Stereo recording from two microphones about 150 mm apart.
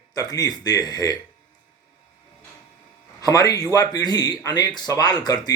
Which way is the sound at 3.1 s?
25° left (ahead or behind).